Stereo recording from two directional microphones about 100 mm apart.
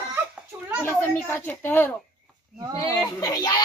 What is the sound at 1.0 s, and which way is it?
Speech, 20° left (ahead or behind).